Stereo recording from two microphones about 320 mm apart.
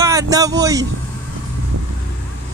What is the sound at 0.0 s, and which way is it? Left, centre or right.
Speech, centre.